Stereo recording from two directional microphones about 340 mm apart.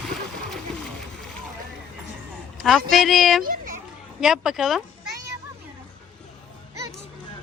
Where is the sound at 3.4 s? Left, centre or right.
Right.